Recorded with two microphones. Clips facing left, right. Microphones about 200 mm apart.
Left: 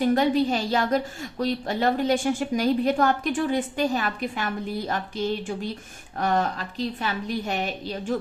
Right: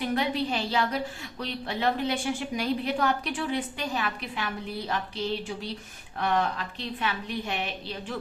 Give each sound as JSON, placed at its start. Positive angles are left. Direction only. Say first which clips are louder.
{"t": 0.0, "sound": "a woman's voice", "louder": "left 7 dB", "side_deg": 45}